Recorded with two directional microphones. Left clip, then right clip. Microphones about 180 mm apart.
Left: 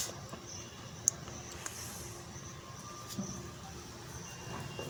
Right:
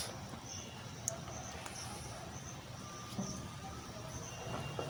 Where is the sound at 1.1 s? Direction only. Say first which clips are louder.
Left 9 dB; 15° left (ahead or behind).